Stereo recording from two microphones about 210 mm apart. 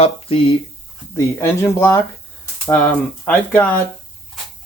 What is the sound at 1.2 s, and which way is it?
Speech, 10° left (ahead or behind).